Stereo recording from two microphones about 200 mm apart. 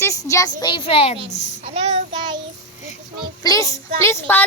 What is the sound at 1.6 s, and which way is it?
Child singing, 30° right (ahead or behind).